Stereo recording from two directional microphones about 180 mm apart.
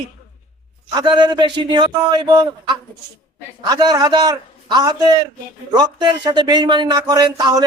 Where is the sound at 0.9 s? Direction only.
25° right (ahead or behind).